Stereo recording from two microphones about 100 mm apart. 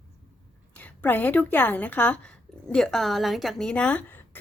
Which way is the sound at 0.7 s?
15° left (ahead or behind).